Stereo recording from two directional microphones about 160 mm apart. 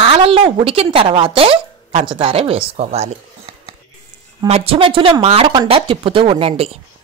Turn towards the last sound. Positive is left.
turn(degrees=-35)  # may be behind; listen again after turning